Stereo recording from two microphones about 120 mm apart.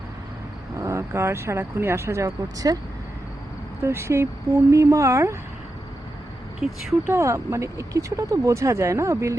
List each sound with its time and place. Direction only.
0.8 s speech: 25° right (ahead or behind)
3.8 s speech: 20° right (ahead or behind)
6.6 s speech: 5° right (ahead or behind)
7.1 s speech: 25° right (ahead or behind)